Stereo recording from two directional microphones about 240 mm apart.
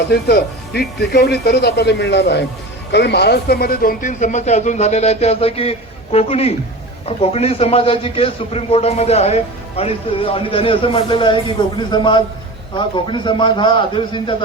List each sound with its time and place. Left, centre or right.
0.1 s a man's voice: left